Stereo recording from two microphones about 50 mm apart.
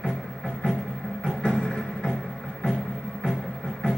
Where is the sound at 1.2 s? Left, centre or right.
Centre.